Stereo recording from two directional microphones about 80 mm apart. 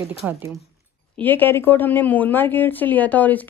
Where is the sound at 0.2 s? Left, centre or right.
Centre.